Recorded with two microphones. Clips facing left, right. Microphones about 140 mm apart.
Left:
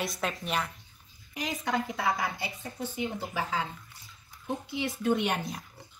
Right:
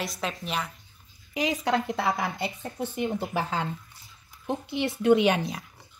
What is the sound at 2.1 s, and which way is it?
Speech, 60° right (ahead or behind).